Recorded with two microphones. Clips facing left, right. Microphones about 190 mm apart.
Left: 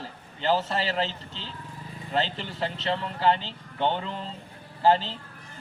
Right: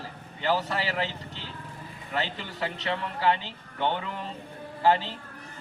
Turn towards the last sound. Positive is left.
turn(degrees=30)  # may be behind; listen again after turning